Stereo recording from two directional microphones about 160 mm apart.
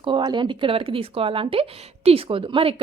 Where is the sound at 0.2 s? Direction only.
25° right (ahead or behind).